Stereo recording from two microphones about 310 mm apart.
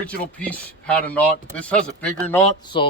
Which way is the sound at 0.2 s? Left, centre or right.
Centre.